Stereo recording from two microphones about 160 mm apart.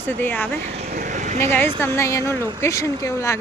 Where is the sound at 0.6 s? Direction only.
40° right (ahead or behind).